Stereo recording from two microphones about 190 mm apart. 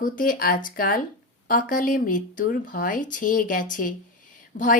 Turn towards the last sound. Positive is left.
turn(degrees=55)  # may be behind; listen again after turning